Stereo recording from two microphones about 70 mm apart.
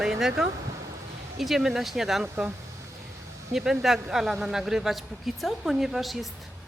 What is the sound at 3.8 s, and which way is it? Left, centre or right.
A woman's voice, centre.